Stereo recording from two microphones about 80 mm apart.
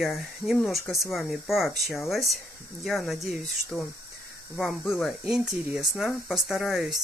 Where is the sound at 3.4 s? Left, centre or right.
Centre.